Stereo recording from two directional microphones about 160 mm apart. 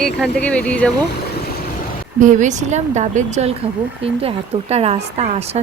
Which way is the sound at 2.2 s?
50° right (ahead or behind).